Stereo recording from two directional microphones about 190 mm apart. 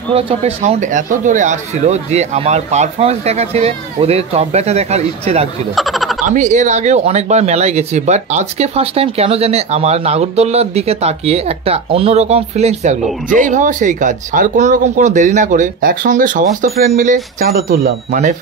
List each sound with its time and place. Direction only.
0.1 s speech: 30° right (ahead or behind)
5.8 s frog: centre (ahead or behind)
6.2 s speech: 40° right (ahead or behind)